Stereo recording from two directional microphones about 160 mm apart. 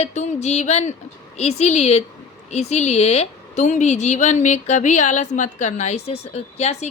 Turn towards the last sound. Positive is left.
turn(degrees=45)  # may be behind; listen again after turning